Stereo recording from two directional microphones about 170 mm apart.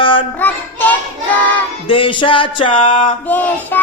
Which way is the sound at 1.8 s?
30° left (ahead or behind).